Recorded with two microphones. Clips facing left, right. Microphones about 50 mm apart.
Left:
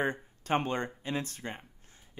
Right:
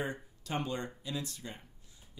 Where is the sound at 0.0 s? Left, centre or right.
Left.